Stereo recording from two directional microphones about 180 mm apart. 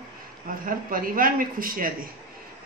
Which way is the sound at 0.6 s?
50° right (ahead or behind).